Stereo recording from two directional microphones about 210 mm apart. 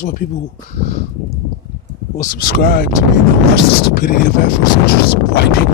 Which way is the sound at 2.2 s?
45° left (ahead or behind).